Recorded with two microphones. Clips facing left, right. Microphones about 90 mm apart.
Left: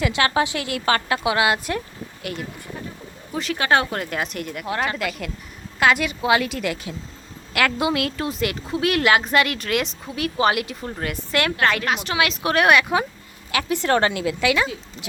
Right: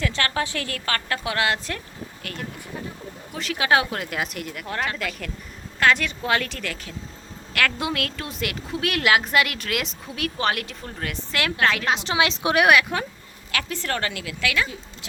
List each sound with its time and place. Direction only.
0.0 s a woman's voice: 15° left (ahead or behind)
3.3 s a woman's voice: centre (ahead or behind)
11.9 s a woman's voice: 25° right (ahead or behind)
12.9 s a woman's voice: 5° left (ahead or behind)
13.8 s a woman's voice: 25° left (ahead or behind)